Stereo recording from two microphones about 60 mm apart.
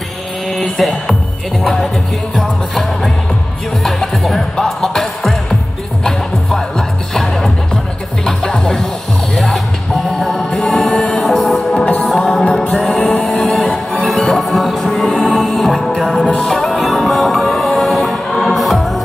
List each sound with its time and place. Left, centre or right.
0.5 s music: centre